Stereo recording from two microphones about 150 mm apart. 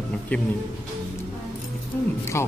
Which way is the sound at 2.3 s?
20° left (ahead or behind).